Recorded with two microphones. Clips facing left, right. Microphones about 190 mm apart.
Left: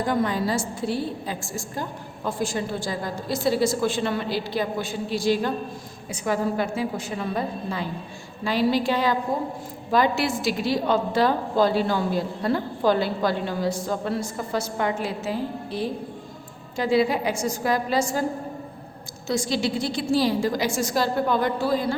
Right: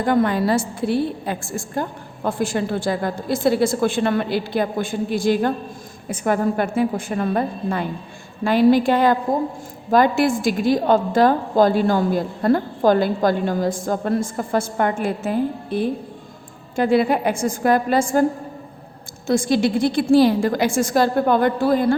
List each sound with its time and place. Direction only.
0.0 s a woman's voice: 60° right (ahead or behind)
19.3 s a woman's voice: 55° right (ahead or behind)